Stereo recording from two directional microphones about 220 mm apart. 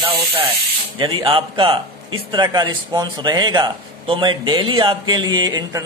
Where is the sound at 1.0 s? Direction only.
20° right (ahead or behind).